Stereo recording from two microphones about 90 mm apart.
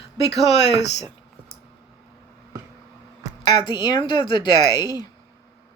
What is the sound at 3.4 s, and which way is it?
Speech, 60° left (ahead or behind).